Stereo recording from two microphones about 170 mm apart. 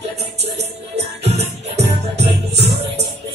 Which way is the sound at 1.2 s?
40° right (ahead or behind).